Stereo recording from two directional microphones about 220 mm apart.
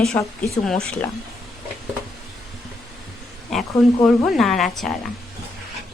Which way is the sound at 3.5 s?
Centre (ahead or behind).